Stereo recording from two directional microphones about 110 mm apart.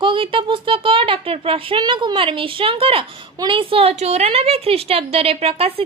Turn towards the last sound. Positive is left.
turn(degrees=-65)  # may be behind; listen again after turning